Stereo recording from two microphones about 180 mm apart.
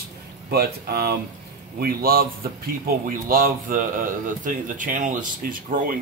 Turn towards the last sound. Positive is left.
turn(degrees=-50)  # may be behind; listen again after turning